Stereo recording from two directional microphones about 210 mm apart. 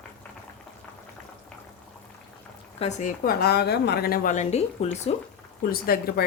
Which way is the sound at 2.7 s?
30° left (ahead or behind).